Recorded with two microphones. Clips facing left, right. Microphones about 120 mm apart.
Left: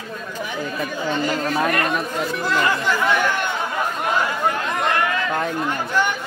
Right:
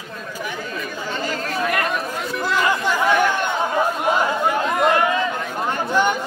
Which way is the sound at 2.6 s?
15° right (ahead or behind).